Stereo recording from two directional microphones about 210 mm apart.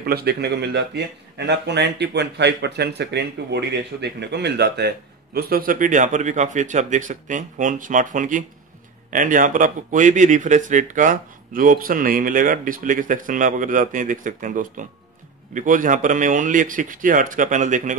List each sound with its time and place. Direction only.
0.0 s speech: 50° right (ahead or behind)